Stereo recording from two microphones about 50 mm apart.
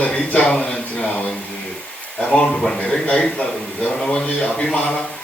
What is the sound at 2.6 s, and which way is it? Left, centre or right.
Speech, centre.